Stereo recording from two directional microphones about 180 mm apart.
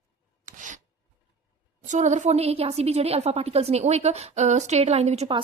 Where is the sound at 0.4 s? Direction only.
45° right (ahead or behind).